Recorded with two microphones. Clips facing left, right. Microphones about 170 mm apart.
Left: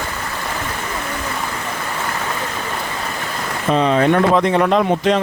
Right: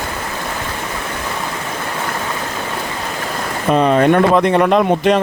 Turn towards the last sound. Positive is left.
turn(degrees=-60)  # may be behind; listen again after turning